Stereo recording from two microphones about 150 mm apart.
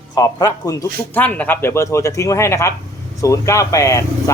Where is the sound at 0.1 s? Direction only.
25° left (ahead or behind).